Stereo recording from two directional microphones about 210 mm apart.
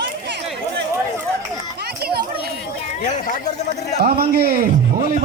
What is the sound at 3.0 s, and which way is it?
Chatter, 35° left (ahead or behind).